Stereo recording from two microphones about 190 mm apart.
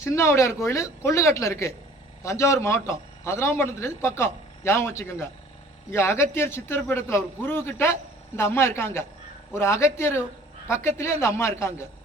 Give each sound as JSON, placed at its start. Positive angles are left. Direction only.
{"t": 0.0, "sound": "a man's voice", "side_deg": 15}